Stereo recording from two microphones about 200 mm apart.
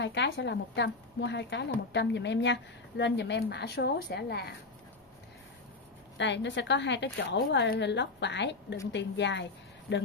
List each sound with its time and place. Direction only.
0.0 s a woman's voice: 60° left (ahead or behind)
6.1 s a woman's voice: 60° left (ahead or behind)